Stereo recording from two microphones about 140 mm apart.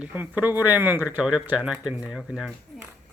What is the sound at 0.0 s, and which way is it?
Speech, 10° right (ahead or behind).